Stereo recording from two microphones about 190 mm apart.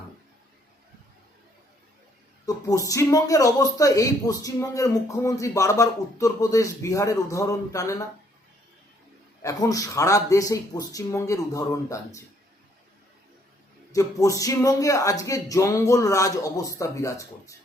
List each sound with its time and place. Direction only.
2.6 s speech: 15° left (ahead or behind)
9.4 s speech: 15° left (ahead or behind)
13.9 s speech: 15° left (ahead or behind)